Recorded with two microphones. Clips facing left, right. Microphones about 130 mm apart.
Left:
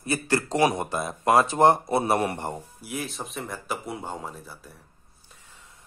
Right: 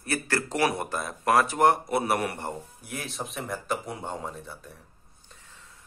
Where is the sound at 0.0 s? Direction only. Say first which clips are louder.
Left 3 dB; 20° left (ahead or behind).